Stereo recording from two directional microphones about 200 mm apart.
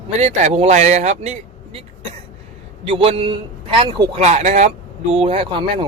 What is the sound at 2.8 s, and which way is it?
A man's voice, 30° right (ahead or behind).